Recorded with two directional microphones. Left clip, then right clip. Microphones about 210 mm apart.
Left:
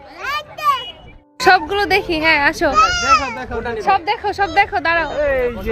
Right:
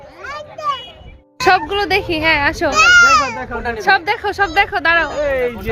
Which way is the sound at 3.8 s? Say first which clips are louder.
Right 2 dB; 15° right (ahead or behind).